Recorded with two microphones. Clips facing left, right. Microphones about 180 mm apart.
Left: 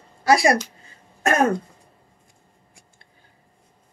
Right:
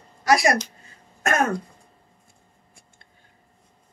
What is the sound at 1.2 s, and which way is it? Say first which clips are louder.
Throat clearing: left 3 dB; 30° left (ahead or behind).